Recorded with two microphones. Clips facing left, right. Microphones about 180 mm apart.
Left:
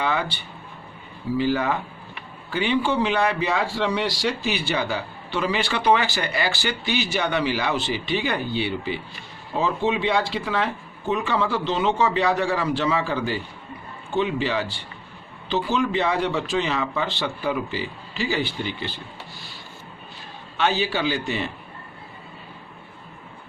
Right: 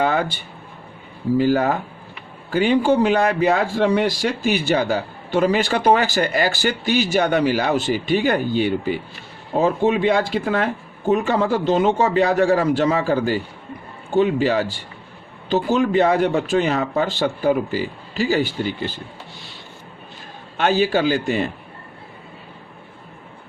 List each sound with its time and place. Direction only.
0.0 s a sound: 45° right (ahead or behind)
1.4 s a man's voice: 45° right (ahead or behind)
20.6 s a man's voice: 45° right (ahead or behind)